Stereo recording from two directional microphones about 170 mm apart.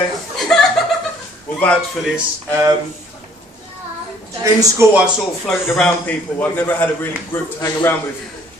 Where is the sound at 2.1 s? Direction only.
15° right (ahead or behind).